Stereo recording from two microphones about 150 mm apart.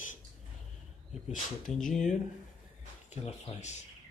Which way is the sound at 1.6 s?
5° left (ahead or behind).